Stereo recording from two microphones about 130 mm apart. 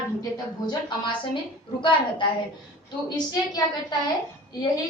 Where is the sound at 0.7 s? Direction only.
35° left (ahead or behind).